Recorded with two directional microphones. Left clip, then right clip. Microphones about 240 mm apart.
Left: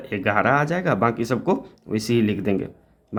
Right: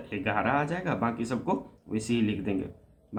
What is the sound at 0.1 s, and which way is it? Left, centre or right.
Speech, left.